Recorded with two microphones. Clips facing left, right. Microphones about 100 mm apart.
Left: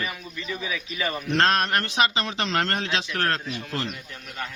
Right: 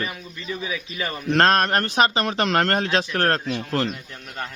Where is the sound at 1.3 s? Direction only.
45° right (ahead or behind).